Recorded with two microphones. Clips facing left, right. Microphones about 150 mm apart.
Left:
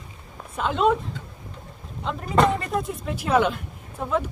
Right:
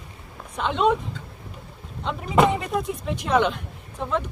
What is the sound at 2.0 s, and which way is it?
Speech, centre (ahead or behind).